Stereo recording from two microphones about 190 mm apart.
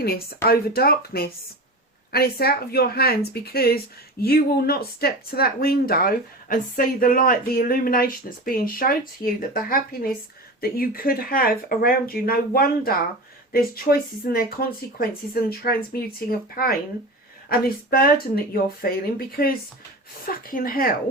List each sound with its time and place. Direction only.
0.0 s speech: 55° left (ahead or behind)